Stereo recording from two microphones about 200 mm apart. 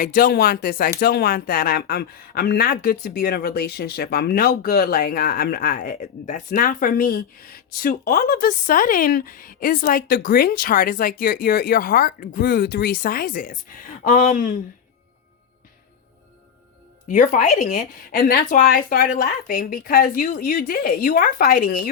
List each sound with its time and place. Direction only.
0.0 s speech: 45° left (ahead or behind)
17.1 s speech: 40° left (ahead or behind)